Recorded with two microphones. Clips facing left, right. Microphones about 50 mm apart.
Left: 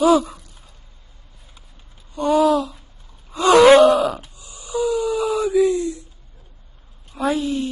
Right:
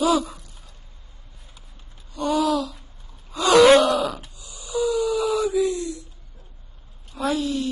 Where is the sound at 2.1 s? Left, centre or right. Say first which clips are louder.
Left 5 dB; centre.